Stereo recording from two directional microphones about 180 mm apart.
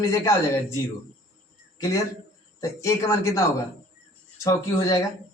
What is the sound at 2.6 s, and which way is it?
Speech, 15° left (ahead or behind).